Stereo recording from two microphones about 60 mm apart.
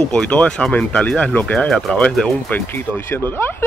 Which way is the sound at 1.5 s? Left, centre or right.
Centre.